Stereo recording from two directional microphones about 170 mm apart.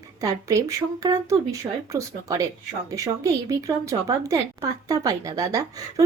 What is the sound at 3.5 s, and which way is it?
A woman's voice, 20° right (ahead or behind).